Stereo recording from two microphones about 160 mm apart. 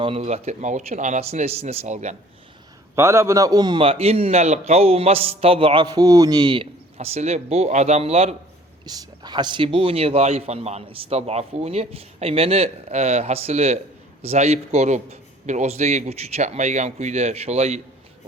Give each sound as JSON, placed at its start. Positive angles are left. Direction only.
{"t": 0.0, "sound": "a man's voice", "side_deg": -40}
{"t": 2.9, "sound": "a man's voice", "side_deg": -15}
{"t": 8.8, "sound": "a man's voice", "side_deg": -25}